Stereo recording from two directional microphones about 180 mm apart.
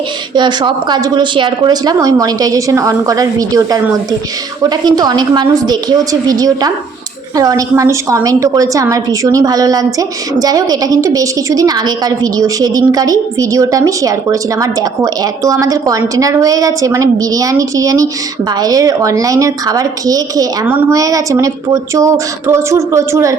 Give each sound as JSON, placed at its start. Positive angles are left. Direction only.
{"t": 0.3, "sound": "a woman's voice", "side_deg": -25}